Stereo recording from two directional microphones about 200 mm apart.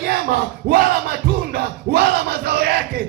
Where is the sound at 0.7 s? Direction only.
50° right (ahead or behind).